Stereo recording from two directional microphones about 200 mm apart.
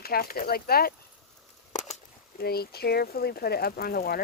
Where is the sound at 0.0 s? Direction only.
50° left (ahead or behind).